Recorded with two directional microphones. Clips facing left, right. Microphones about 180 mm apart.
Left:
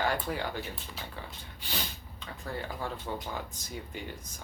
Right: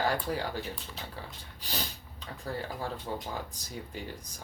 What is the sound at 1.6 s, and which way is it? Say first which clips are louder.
Speech: right 1 dB; 40° right (ahead or behind).